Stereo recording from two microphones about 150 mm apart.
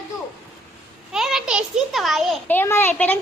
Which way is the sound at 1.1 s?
5° right (ahead or behind).